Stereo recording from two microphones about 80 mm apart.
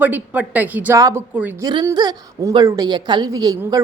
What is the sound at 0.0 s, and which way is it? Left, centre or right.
Speech, right.